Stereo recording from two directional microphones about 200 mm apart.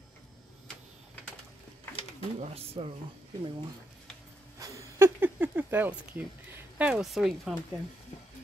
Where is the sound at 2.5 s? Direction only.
30° right (ahead or behind).